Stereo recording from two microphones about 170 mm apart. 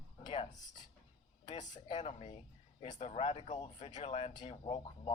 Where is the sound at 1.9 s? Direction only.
40° left (ahead or behind).